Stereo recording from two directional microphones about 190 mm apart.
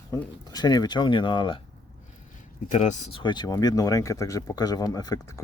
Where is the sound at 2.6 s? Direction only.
40° left (ahead or behind).